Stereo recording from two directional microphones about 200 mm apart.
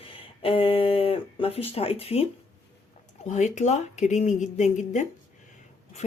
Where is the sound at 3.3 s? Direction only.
35° left (ahead or behind).